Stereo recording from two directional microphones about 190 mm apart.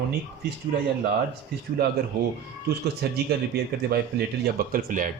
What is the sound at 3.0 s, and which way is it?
A man's voice, 60° right (ahead or behind).